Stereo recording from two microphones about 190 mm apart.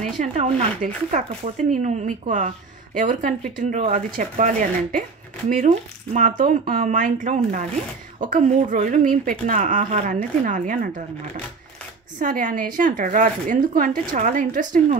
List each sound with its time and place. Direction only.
0.0 s speech: 40° right (ahead or behind)
12.2 s speech: 45° right (ahead or behind)